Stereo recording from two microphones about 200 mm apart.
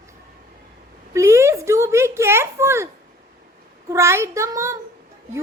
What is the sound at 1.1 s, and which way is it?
A woman's voice, 15° right (ahead or behind).